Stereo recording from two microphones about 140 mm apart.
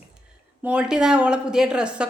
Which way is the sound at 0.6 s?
5° right (ahead or behind).